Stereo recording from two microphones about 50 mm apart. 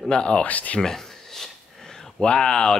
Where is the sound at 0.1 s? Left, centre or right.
Centre.